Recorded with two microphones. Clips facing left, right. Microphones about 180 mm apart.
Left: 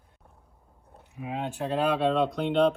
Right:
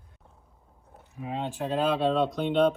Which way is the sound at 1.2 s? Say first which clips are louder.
Even; 10° left (ahead or behind).